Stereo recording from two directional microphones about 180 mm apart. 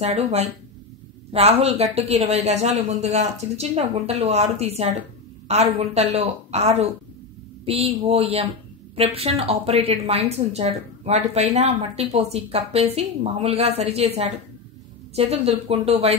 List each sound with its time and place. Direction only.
0.0 s a woman's voice: 35° right (ahead or behind)